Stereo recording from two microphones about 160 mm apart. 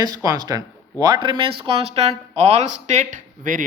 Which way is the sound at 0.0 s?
25° right (ahead or behind).